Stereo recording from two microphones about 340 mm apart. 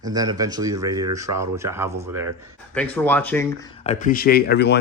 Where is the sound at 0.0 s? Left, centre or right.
Centre.